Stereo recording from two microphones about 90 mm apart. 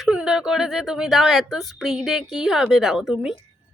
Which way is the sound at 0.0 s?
10° right (ahead or behind).